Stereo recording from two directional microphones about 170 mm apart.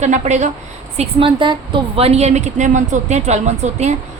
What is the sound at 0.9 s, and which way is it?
A woman's voice, 30° right (ahead or behind).